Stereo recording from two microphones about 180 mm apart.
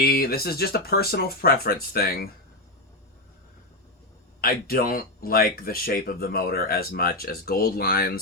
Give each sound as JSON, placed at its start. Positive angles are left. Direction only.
{"t": 0.0, "sound": "speech", "side_deg": 55}
{"t": 4.4, "sound": "speech", "side_deg": 55}